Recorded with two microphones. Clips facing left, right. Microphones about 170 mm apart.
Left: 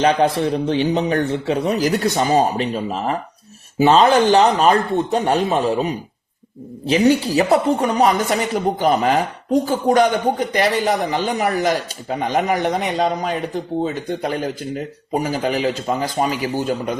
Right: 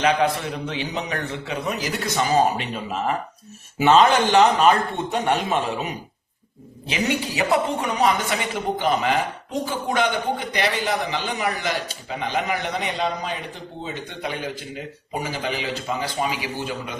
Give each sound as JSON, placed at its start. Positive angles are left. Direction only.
{"t": 0.0, "sound": "speech", "side_deg": 35}